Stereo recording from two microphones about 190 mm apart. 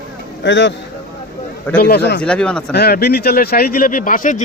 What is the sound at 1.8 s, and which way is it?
Speech, 55° left (ahead or behind).